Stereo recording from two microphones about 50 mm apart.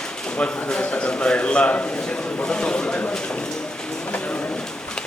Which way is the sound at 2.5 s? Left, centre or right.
Centre.